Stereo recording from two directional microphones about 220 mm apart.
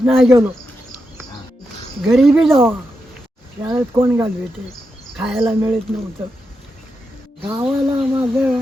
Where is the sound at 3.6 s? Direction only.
10° right (ahead or behind).